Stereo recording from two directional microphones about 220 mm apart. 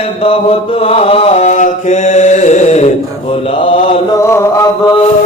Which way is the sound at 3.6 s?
25° left (ahead or behind).